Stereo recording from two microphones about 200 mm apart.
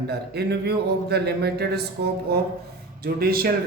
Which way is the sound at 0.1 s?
55° right (ahead or behind).